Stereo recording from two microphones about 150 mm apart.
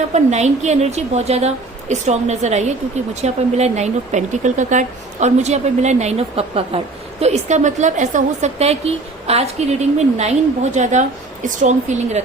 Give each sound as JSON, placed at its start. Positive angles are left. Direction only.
{"t": 0.1, "sound": "speech", "side_deg": -50}